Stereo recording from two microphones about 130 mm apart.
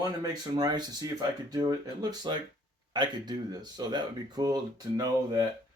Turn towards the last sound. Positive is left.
turn(degrees=-30)  # may be behind; listen again after turning